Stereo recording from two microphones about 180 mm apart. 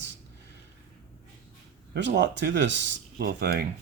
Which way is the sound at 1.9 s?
75° right (ahead or behind).